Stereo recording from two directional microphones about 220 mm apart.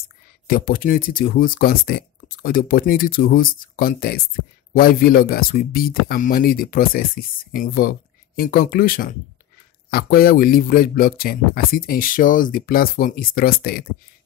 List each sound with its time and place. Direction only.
0.5 s a man's voice: 40° left (ahead or behind)